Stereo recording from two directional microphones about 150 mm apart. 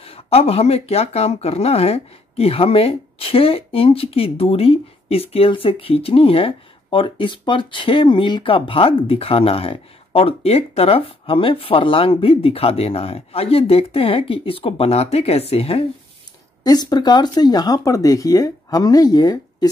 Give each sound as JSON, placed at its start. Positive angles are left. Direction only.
{"t": 0.0, "sound": "speech", "side_deg": 40}
{"t": 16.6, "sound": "speech", "side_deg": 25}